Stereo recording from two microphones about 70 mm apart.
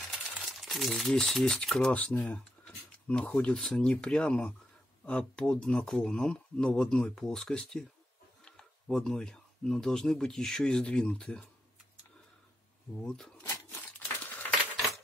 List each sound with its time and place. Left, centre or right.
0.5 s speech: centre
2.0 s speech: left
8.8 s speech: centre
13.0 s speech: centre
13.5 s a sound: left